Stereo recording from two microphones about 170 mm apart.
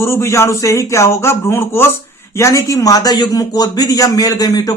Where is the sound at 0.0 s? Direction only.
15° left (ahead or behind).